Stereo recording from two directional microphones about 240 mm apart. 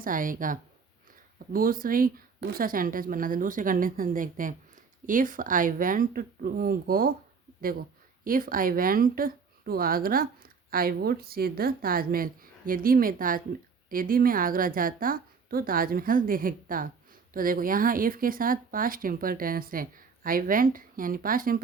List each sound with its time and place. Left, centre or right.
0.0 s speech: right
8.2 s speech: right